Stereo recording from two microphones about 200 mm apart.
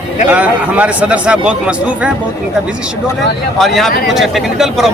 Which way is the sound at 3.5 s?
Centre (ahead or behind).